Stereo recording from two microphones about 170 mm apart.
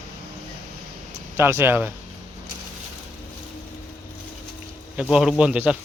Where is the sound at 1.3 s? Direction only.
15° right (ahead or behind).